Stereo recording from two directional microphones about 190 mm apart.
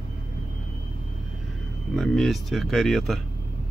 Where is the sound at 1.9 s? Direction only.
Centre (ahead or behind).